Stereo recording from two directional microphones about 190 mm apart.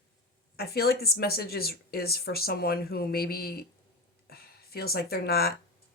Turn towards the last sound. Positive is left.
turn(degrees=55)  # may be behind; listen again after turning